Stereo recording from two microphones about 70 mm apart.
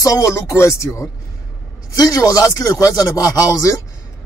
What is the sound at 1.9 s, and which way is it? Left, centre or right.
Speech, left.